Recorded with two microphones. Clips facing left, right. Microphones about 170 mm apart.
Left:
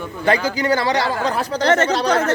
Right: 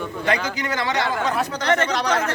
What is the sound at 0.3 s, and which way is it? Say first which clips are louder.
Speech: left 7 dB; 35° left (ahead or behind).